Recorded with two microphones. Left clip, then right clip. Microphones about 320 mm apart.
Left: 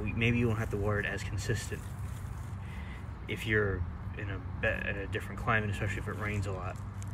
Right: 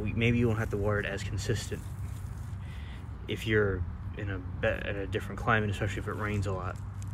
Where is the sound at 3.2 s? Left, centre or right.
Right.